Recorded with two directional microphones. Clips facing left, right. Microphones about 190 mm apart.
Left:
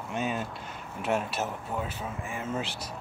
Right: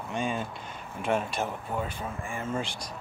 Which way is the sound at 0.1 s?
5° left (ahead or behind).